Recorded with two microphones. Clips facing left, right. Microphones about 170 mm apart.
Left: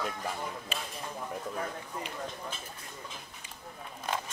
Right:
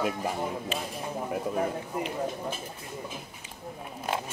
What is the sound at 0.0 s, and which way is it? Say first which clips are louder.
Speech: right 6 dB; 10° right (ahead or behind).